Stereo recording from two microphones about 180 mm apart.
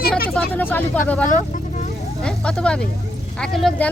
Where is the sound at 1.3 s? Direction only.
45° left (ahead or behind).